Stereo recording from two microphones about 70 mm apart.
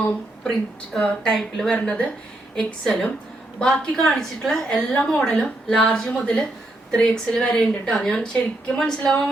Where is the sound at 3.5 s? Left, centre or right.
Centre.